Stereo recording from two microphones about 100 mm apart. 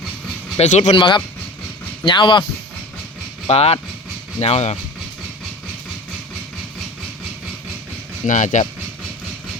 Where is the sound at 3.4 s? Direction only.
90° left.